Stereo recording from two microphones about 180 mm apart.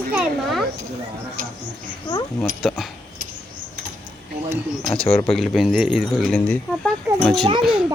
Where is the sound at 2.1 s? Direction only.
25° left (ahead or behind).